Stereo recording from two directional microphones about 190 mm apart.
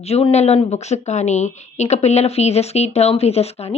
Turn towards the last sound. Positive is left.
turn(degrees=35)  # may be behind; listen again after turning